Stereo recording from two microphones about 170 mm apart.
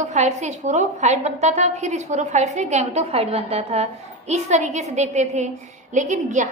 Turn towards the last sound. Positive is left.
turn(degrees=-45)  # may be behind; listen again after turning